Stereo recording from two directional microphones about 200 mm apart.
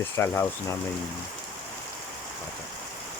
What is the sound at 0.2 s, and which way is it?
Speech, 10° left (ahead or behind).